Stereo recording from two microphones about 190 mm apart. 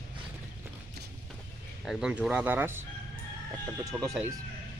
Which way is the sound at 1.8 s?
5° right (ahead or behind).